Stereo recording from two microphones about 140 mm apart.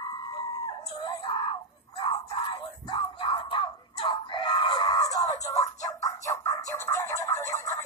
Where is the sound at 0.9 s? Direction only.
25° left (ahead or behind).